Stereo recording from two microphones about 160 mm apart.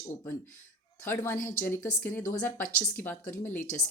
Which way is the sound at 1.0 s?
15° left (ahead or behind).